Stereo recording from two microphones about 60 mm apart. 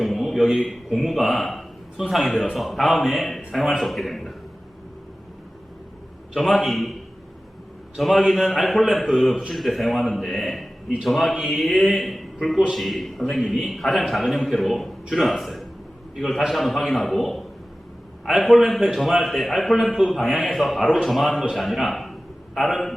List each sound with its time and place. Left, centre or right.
0.0 s a man's voice: centre
6.3 s a man's voice: centre
7.9 s a man's voice: centre